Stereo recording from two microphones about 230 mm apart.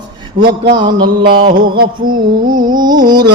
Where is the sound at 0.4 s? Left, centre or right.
Right.